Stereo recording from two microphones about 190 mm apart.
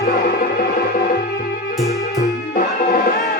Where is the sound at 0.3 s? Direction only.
55° left (ahead or behind).